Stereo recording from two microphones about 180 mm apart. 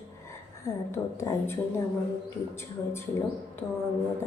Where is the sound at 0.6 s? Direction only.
15° left (ahead or behind).